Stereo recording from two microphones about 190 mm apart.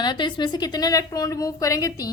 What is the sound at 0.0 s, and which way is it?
A woman's voice, 25° left (ahead or behind).